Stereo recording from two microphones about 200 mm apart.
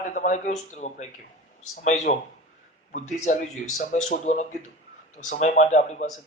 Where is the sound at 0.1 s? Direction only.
40° left (ahead or behind).